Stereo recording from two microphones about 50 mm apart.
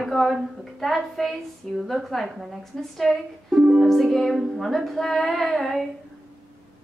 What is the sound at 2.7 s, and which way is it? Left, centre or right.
Speech, centre.